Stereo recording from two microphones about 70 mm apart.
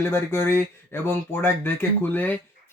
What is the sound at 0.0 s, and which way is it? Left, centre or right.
Speech, left.